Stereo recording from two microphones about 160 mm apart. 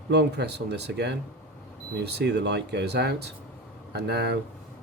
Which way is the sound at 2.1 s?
90° right.